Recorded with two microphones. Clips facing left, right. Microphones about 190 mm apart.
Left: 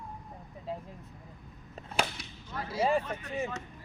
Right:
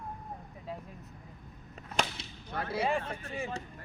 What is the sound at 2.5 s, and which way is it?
Speech, 60° right (ahead or behind).